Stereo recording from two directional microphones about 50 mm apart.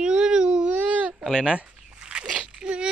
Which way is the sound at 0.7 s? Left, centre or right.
Right.